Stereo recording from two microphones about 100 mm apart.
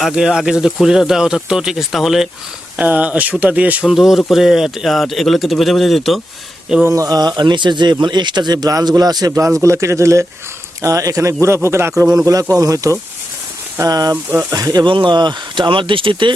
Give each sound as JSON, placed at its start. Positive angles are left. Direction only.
{"t": 0.0, "sound": "speech", "side_deg": -5}
{"t": 2.7, "sound": "speech", "side_deg": -15}
{"t": 3.9, "sound": "speech", "side_deg": -5}
{"t": 6.8, "sound": "a man's voice", "side_deg": -35}
{"t": 14.8, "sound": "speech", "side_deg": -55}